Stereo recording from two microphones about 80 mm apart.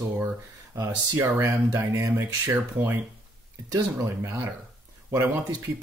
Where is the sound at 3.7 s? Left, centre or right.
Right.